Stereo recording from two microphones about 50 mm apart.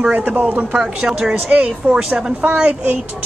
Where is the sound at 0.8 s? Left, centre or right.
Centre.